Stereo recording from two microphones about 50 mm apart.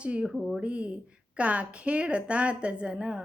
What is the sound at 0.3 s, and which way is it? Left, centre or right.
Speech, centre.